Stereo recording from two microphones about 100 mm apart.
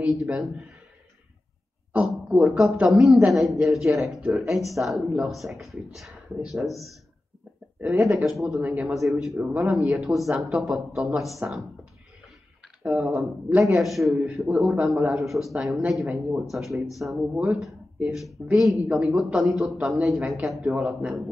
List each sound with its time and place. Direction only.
0.0 s speech: 5° right (ahead or behind)
1.9 s speech: 10° right (ahead or behind)
8.4 s speech: centre (ahead or behind)
8.6 s a man's voice: 20° right (ahead or behind)
8.9 s speech: centre (ahead or behind)
11.4 s a man's voice: 20° right (ahead or behind)
12.9 s a man's voice: 15° right (ahead or behind)
17.3 s a man's voice: 15° right (ahead or behind)
18.1 s a man's voice: centre (ahead or behind)